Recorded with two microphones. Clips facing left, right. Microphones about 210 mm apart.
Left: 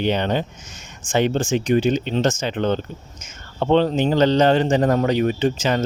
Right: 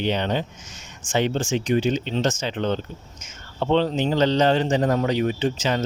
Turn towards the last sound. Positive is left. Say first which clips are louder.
# left 3 dB
turn(degrees=55)  # may be behind; listen again after turning